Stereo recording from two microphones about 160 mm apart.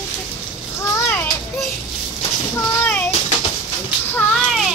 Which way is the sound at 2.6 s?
10° left (ahead or behind).